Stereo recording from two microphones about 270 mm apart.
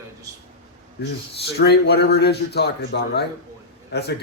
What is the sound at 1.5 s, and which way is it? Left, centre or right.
A man's voice, left.